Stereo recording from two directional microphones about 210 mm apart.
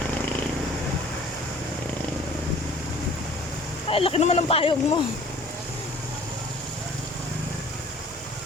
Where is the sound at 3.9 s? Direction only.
25° left (ahead or behind).